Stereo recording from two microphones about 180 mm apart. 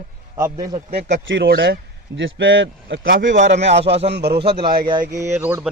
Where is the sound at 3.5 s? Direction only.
35° right (ahead or behind).